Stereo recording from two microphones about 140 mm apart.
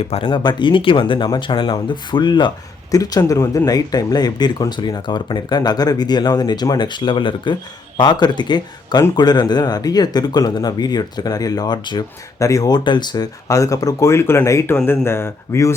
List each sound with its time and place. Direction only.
0.1 s speech: 35° left (ahead or behind); by 15.7 s 20° left (ahead or behind)